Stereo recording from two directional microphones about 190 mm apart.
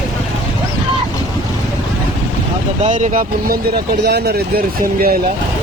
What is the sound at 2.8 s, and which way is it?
Speech, 40° right (ahead or behind).